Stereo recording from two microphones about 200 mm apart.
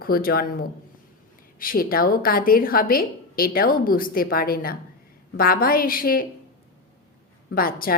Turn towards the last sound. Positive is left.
turn(degrees=45)  # may be behind; listen again after turning